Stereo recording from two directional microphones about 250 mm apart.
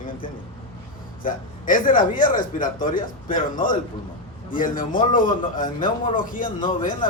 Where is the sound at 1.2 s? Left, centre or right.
Left.